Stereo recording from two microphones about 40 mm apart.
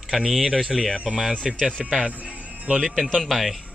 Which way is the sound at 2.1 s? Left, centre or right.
Right.